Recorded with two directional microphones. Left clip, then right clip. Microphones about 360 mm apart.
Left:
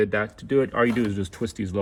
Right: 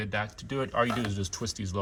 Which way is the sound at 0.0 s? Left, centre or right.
Centre.